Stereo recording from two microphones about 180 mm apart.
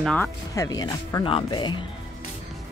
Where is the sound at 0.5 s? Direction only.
20° left (ahead or behind).